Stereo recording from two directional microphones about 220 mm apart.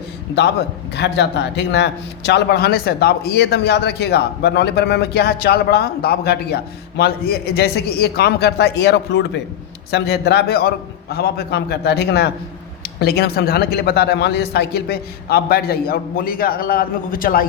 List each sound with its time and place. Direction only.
0.9 s a man's voice: 50° left (ahead or behind)